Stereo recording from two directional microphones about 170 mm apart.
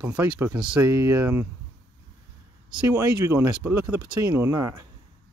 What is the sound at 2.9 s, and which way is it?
Speech, 15° right (ahead or behind).